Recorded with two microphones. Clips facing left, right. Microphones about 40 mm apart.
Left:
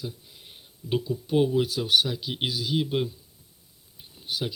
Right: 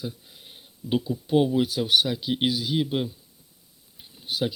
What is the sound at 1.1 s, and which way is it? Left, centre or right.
Speech, centre.